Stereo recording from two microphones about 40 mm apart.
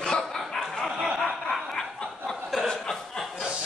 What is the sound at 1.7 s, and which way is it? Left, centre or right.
Snicker, centre.